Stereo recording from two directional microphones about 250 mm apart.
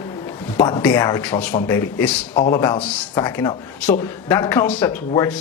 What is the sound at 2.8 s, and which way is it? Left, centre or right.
Speech, centre.